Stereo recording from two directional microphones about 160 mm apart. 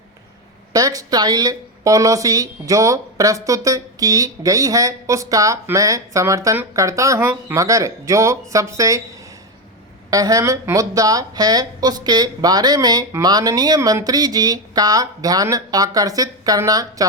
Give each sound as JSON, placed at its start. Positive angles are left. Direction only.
{"t": 0.7, "sound": "speech", "side_deg": -20}
{"t": 10.1, "sound": "speech", "side_deg": -20}